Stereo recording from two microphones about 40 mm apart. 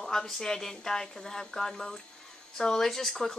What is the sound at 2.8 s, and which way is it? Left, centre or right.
Speech, centre.